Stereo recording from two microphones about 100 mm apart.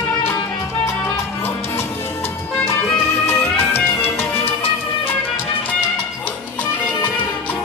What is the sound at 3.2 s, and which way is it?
Music, 25° left (ahead or behind).